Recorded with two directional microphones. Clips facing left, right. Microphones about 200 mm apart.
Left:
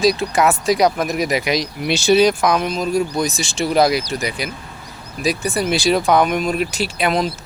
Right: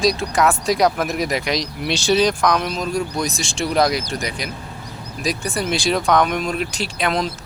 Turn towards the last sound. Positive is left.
turn(degrees=5)  # may be behind; listen again after turning